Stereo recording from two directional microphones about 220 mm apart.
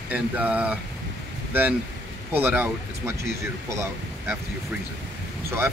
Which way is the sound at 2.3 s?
5° right (ahead or behind).